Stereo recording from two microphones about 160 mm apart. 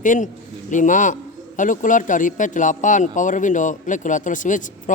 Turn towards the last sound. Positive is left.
turn(degrees=55)  # may be behind; listen again after turning